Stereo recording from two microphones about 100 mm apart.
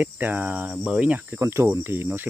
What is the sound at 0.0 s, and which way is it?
Cricket, 15° right (ahead or behind).